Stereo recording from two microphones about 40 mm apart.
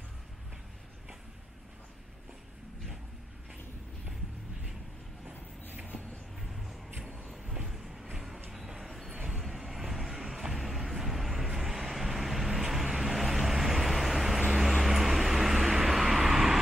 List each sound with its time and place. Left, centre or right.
6.4 s music: centre
7.4 s vehicle: centre
9.1 s vehicle: centre
9.4 s vehicle: centre